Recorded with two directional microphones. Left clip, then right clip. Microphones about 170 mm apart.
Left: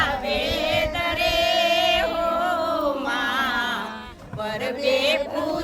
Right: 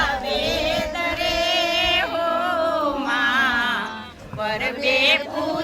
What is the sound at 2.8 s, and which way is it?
Music, 90° left.